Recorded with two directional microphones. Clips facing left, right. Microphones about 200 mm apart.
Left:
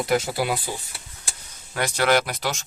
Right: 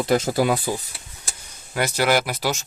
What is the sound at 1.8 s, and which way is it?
Speech, 5° right (ahead or behind).